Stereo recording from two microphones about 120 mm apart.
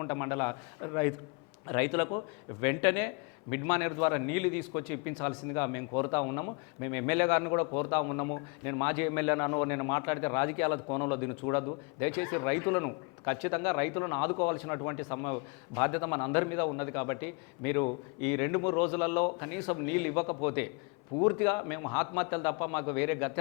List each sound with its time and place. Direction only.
0.0 s a man's voice: 25° left (ahead or behind)